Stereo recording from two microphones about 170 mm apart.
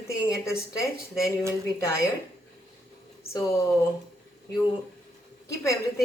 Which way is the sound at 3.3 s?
15° left (ahead or behind).